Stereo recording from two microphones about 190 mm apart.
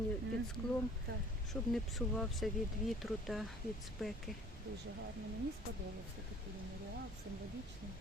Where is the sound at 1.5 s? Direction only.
Centre (ahead or behind).